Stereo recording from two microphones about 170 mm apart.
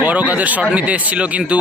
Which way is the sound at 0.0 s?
10° right (ahead or behind).